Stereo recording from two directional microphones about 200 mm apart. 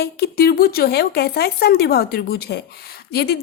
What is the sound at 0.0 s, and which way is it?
Speech, 50° left (ahead or behind).